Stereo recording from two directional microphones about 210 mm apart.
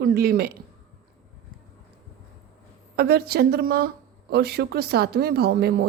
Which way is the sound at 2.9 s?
50° right (ahead or behind).